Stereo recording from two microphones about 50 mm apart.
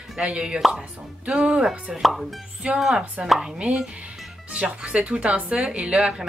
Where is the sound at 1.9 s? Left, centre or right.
Centre.